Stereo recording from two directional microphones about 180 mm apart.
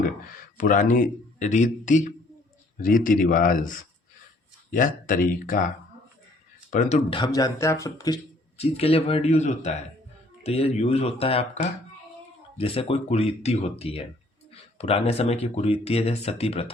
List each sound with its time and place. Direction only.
0.5 s speech: 45° left (ahead or behind)
6.7 s speech: 45° left (ahead or behind)
7.1 s speech: 25° left (ahead or behind)
8.5 s speech: 35° left (ahead or behind)